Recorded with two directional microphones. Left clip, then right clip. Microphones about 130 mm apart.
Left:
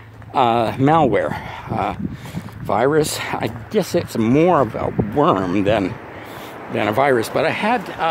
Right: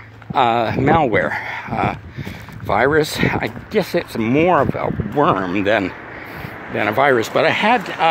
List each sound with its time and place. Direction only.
0.3 s speech: 40° left (ahead or behind)
4.6 s speech: 30° left (ahead or behind)
5.2 s speech: 50° left (ahead or behind)
5.6 s speech: 35° left (ahead or behind)
7.2 s speech: 5° left (ahead or behind)